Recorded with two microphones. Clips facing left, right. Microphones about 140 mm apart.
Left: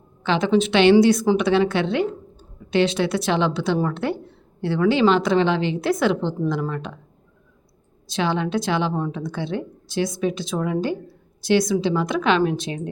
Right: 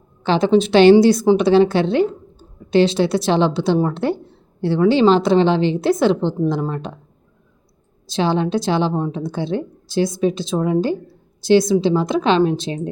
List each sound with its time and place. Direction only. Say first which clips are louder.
0.2 s a woman's voice: right 4 dB; 35° right (ahead or behind)
8.0 s a woman's voice: right 4 dB; 30° right (ahead or behind)